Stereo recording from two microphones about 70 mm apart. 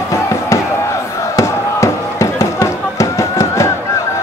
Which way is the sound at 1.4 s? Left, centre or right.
Left.